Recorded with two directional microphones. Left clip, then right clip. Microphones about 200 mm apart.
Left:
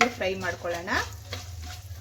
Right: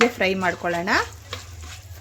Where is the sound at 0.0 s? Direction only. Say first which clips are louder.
Right 6 dB; 60° right (ahead or behind).